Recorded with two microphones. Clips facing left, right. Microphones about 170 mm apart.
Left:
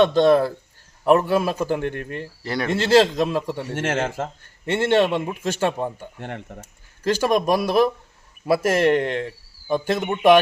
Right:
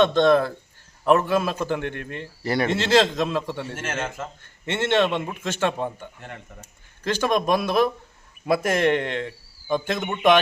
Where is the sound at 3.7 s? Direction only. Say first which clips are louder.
Left 6 dB; 75° left (ahead or behind).